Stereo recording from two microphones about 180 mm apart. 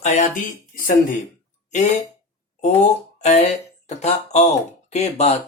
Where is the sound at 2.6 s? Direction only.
40° left (ahead or behind).